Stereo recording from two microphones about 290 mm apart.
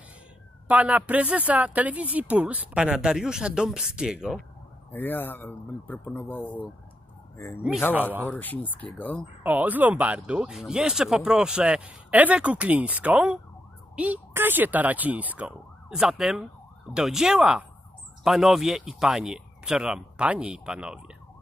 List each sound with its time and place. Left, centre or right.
0.7 s a man's voice: centre
7.6 s speech: centre
9.4 s speech: centre